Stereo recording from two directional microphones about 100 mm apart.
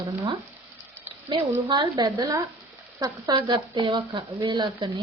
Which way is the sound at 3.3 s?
50° right (ahead or behind).